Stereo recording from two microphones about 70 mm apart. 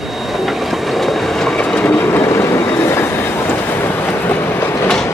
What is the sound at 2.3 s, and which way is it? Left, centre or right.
Train, left.